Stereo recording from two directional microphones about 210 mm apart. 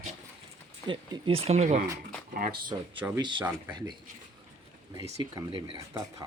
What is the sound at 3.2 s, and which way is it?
Speech, 20° right (ahead or behind).